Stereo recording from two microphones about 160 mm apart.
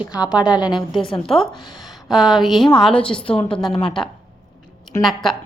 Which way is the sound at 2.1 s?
Centre (ahead or behind).